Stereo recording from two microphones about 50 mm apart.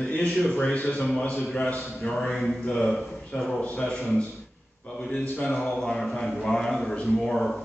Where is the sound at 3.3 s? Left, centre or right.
Centre.